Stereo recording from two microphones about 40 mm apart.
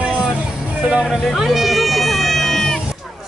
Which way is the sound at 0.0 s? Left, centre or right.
Right.